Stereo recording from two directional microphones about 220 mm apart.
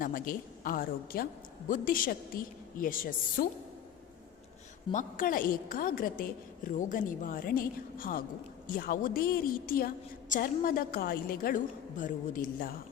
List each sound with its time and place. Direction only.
0.0 s a woman's voice: 40° left (ahead or behind)
4.9 s a woman's voice: 35° left (ahead or behind)